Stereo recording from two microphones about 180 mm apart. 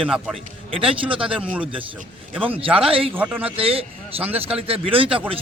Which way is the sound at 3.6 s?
30° right (ahead or behind).